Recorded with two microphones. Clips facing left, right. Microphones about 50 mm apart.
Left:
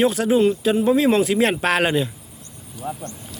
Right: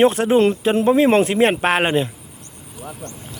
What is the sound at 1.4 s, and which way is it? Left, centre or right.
Speech, right.